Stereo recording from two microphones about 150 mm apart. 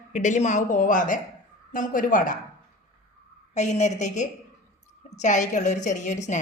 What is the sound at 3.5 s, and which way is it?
Speech, 50° left (ahead or behind).